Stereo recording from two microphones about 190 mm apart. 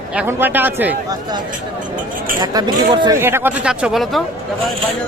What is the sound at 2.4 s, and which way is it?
Speech, 20° right (ahead or behind).